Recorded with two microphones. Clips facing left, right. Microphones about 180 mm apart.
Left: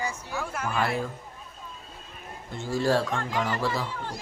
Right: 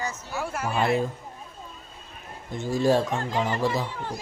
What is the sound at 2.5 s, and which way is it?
Speech, 15° right (ahead or behind).